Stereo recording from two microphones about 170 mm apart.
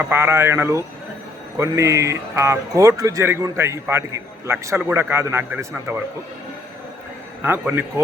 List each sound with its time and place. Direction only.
0.0 s speech: 15° right (ahead or behind)
7.4 s speech: 10° right (ahead or behind)